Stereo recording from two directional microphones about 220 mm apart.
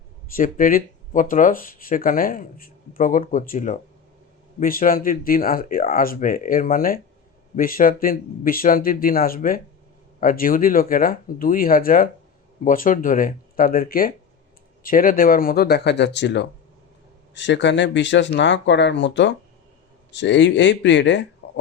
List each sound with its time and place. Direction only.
0.3 s speech: 40° left (ahead or behind); by 21.6 s 55° left (ahead or behind)